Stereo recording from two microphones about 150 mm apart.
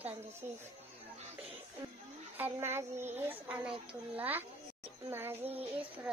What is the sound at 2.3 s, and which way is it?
A child's voice, 15° right (ahead or behind).